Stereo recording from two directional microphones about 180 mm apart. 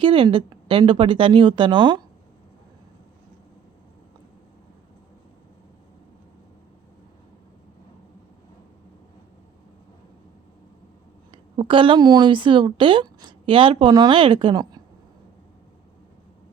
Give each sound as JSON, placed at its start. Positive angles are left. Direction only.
{"t": 0.0, "sound": "a woman's voice", "side_deg": -30}
{"t": 11.3, "sound": "a woman's voice", "side_deg": -30}